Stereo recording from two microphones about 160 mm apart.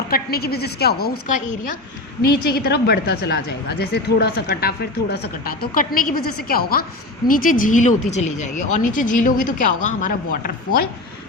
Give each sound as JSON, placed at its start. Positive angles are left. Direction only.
{"t": 0.1, "sound": "a woman's voice", "side_deg": 75}
{"t": 2.3, "sound": "a woman's voice", "side_deg": 75}